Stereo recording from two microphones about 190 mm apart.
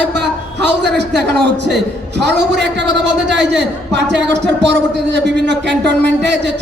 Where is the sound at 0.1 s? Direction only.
65° right (ahead or behind).